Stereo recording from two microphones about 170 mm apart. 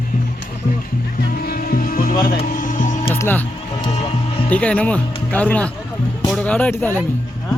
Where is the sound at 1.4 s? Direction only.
60° left (ahead or behind).